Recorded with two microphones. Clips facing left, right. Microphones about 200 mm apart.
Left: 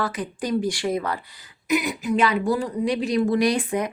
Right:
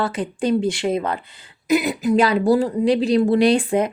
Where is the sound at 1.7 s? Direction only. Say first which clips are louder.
Right 5 dB; 35° right (ahead or behind).